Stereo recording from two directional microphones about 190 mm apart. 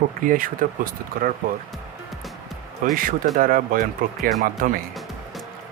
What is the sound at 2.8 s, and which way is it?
Speech, 45° right (ahead or behind).